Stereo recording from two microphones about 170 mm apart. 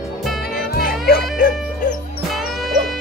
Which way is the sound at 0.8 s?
60° left (ahead or behind).